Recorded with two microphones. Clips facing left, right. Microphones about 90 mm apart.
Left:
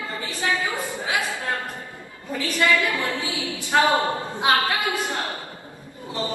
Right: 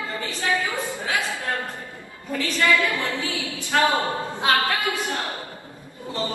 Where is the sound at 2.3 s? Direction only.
20° left (ahead or behind).